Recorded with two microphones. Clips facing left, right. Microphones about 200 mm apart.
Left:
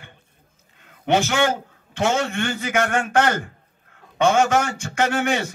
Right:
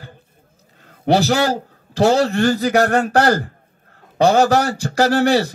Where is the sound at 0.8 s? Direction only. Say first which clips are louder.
Right 5 dB; 35° right (ahead or behind).